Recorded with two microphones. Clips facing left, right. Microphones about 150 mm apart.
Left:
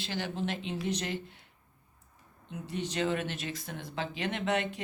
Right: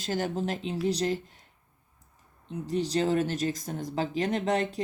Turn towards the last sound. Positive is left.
turn(degrees=-35)  # may be behind; listen again after turning